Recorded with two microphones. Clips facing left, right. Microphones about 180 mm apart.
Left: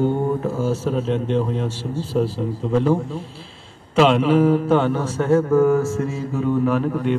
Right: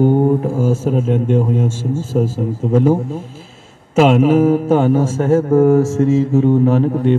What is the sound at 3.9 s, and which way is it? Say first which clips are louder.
Speech: right 4 dB; 45° right (ahead or behind).